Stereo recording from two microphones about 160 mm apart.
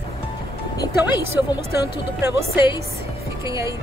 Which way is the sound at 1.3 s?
15° right (ahead or behind).